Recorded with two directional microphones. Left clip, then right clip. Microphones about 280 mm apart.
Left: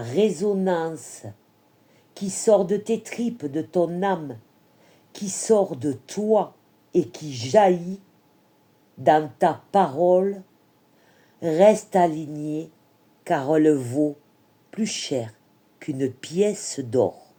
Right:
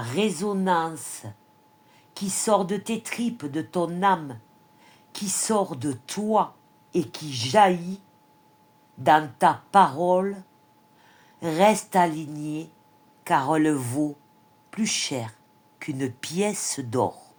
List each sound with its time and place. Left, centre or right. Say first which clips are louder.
0.0 s speech: left 5 dB; centre
4.9 s a sound: right 2 dB; centre
5.6 s speech: left 3 dB; centre
9.7 s speech: left 2 dB; centre
11.3 s speech: left 4 dB; centre